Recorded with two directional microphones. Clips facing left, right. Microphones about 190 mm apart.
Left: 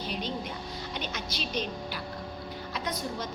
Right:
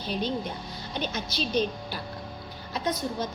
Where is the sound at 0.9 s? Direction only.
35° right (ahead or behind).